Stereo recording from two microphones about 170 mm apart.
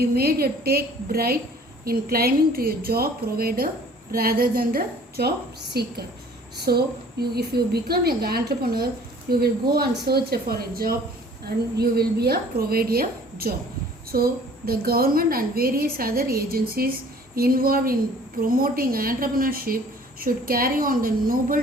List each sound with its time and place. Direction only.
0.0 s a woman's voice: 65° right (ahead or behind)